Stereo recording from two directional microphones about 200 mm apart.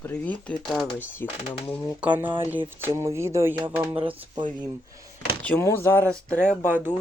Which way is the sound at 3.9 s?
25° right (ahead or behind).